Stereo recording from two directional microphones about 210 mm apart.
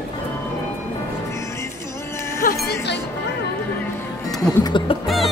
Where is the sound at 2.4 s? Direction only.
45° left (ahead or behind).